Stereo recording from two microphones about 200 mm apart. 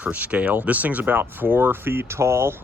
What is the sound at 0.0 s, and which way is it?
Speech, 10° right (ahead or behind).